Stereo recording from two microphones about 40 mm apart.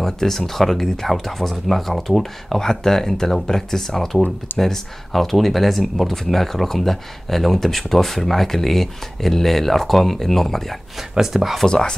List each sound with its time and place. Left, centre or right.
0.0 s speech: centre
11.0 s speech: centre
11.6 s speech: centre